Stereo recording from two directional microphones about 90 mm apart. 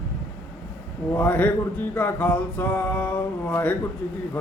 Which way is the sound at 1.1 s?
20° left (ahead or behind).